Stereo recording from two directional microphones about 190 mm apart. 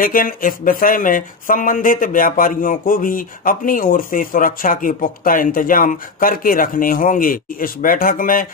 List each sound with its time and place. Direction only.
0.0 s speech: 50° left (ahead or behind)